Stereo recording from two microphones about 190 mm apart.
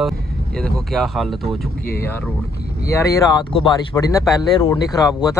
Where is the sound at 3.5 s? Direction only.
25° left (ahead or behind).